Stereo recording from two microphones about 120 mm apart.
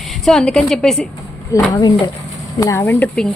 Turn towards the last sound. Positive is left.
turn(degrees=5)  # may be behind; listen again after turning